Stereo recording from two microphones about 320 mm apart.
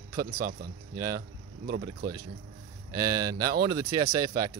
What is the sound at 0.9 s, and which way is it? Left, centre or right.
Speech, centre.